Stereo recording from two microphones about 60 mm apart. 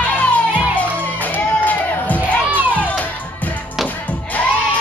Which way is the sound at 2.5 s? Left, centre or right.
Right.